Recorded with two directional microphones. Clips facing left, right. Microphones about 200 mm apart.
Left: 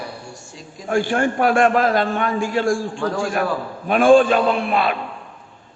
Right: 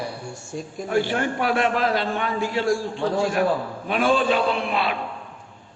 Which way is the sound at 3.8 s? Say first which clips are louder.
Left 8 dB; 50° left (ahead or behind).